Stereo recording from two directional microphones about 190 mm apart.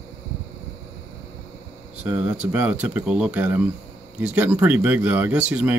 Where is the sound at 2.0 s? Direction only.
5° right (ahead or behind).